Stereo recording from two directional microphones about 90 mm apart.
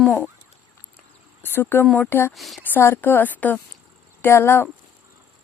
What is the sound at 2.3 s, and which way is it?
Speech, centre (ahead or behind).